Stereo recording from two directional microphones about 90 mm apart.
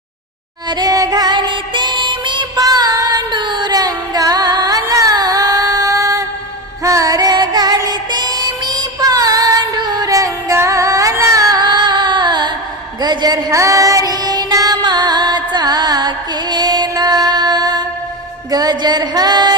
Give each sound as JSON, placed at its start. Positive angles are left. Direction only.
{"t": 0.7, "sound": "music", "side_deg": -45}
{"t": 2.6, "sound": "female singing", "side_deg": -45}
{"t": 6.8, "sound": "music", "side_deg": -40}